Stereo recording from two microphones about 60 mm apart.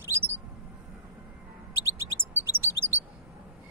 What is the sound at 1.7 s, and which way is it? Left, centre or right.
Chirp, right.